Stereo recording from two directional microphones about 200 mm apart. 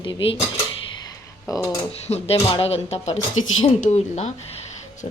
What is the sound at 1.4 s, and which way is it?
Speech, 15° left (ahead or behind).